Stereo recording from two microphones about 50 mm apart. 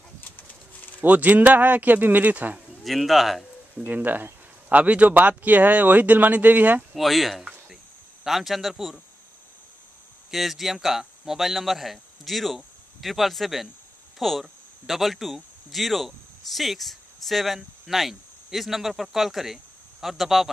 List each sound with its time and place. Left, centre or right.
0.2 s pigeon: left
1.0 s speech: right
2.8 s speech: centre
3.7 s speech: right
6.9 s speech: centre
10.3 s speech: centre